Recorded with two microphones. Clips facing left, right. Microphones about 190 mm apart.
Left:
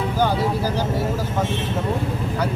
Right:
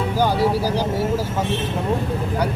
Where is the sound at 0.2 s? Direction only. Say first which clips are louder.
Right 2 dB; 10° right (ahead or behind).